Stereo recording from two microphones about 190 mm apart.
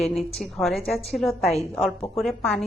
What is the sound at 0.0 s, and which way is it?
Speech, 30° left (ahead or behind).